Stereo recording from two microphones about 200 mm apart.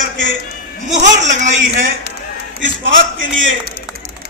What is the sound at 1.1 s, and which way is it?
Speech, 35° right (ahead or behind).